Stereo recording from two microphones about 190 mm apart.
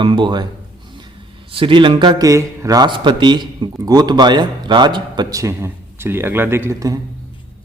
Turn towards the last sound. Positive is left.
turn(degrees=-15)  # may be behind; listen again after turning